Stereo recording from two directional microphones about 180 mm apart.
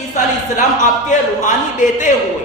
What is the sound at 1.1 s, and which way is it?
A man's voice, 45° left (ahead or behind).